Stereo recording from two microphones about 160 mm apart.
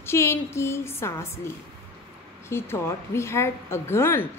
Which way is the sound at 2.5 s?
15° left (ahead or behind).